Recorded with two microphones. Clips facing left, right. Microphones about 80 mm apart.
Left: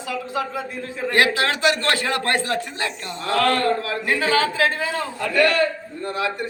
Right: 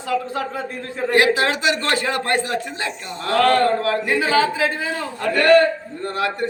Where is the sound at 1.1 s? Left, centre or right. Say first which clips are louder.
Right 3 dB; right.